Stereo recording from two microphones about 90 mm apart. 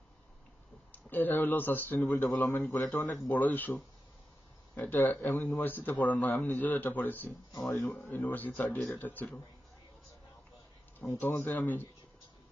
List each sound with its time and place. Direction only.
1.1 s a man's voice: 20° left (ahead or behind)
11.1 s a man's voice: 20° left (ahead or behind)